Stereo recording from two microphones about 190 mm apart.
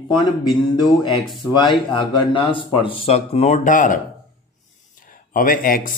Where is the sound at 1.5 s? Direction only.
25° left (ahead or behind); by 3.9 s 45° left (ahead or behind).